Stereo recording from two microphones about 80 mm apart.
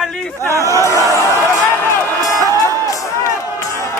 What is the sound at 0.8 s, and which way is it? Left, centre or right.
Speech, left.